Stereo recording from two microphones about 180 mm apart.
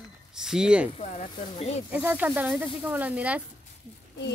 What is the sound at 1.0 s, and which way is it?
Speech, 40° left (ahead or behind).